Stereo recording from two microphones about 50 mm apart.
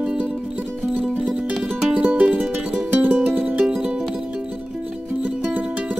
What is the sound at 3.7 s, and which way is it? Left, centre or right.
Music, centre.